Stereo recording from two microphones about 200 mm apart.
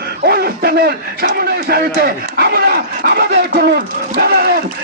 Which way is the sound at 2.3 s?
50° right (ahead or behind).